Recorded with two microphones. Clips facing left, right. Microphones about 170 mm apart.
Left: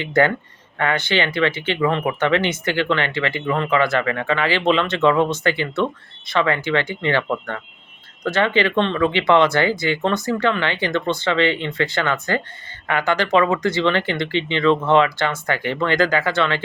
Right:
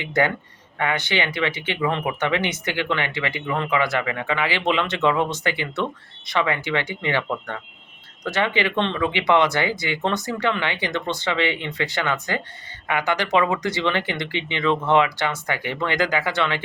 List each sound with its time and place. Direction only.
0.0 s speech: 15° right (ahead or behind)